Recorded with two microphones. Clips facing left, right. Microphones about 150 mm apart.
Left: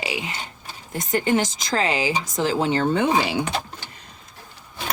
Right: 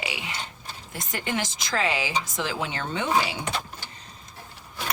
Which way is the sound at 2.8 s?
50° left (ahead or behind).